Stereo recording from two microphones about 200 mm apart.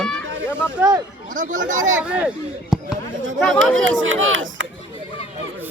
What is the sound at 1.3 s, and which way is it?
Speech, 40° right (ahead or behind).